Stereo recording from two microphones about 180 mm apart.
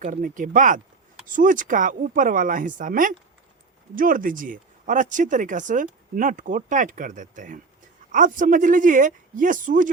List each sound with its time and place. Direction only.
0.0 s speech: 45° right (ahead or behind)